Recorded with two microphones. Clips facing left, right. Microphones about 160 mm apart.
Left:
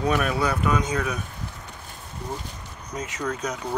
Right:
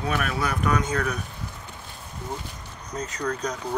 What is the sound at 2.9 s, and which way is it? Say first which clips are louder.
Speech: even; 5° left (ahead or behind).